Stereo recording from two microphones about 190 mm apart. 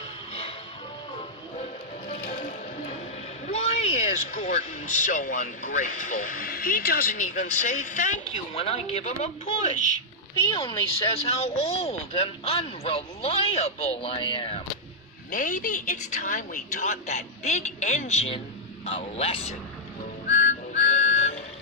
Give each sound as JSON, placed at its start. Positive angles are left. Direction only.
{"t": 1.6, "sound": "music", "side_deg": 40}
{"t": 3.4, "sound": "speech", "side_deg": 35}
{"t": 10.5, "sound": "speech", "side_deg": 30}
{"t": 15.3, "sound": "speech", "side_deg": 45}
{"t": 20.2, "sound": "music", "side_deg": 35}